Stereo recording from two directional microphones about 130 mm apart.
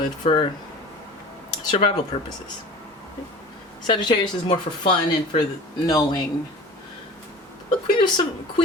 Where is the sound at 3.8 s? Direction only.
35° left (ahead or behind).